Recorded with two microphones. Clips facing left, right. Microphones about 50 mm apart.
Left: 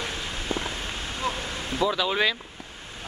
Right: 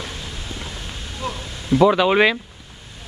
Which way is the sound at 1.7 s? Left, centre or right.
Right.